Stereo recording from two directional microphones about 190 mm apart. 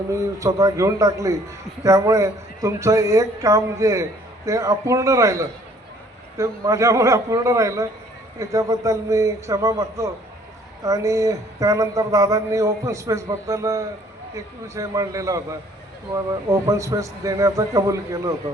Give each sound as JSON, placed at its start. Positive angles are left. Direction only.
{"t": 0.1, "sound": "speech", "side_deg": -15}